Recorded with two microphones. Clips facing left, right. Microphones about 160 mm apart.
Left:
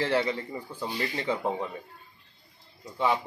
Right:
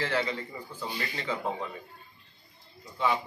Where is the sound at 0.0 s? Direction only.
25° left (ahead or behind).